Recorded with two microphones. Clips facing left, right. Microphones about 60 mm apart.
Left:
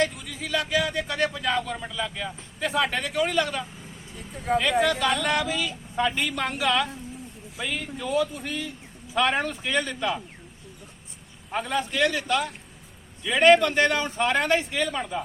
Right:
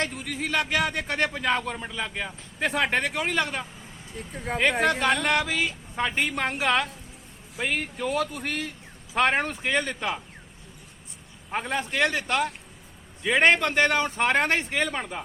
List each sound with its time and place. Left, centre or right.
0.4 s a man's voice: right
2.0 s a man's voice: right
4.8 s a man's voice: right
7.6 s speech: right
9.1 s a man's voice: right
11.5 s a man's voice: right